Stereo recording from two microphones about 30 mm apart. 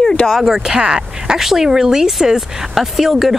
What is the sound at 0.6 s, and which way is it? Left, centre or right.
Speech, right.